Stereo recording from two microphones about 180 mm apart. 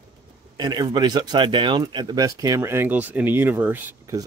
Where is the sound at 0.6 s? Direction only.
20° right (ahead or behind).